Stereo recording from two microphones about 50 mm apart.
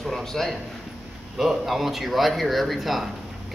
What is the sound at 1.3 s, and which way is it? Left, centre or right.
A man's voice, centre.